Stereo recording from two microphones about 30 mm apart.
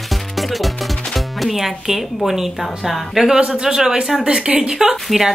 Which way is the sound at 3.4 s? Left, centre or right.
Right.